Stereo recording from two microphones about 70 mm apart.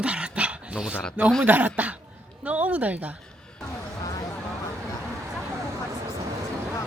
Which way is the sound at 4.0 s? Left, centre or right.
Left.